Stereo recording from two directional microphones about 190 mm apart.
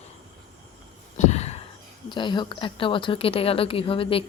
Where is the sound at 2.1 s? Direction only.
25° left (ahead or behind).